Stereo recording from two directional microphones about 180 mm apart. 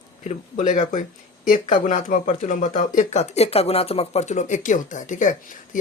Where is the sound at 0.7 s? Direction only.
45° left (ahead or behind).